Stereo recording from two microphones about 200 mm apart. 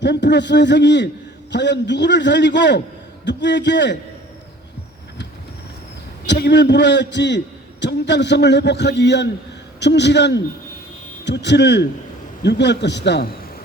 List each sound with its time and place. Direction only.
0.0 s a man's voice: 60° left (ahead or behind)
6.2 s a man's voice: 60° left (ahead or behind)